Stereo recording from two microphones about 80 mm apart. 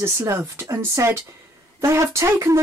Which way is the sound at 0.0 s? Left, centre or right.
Right.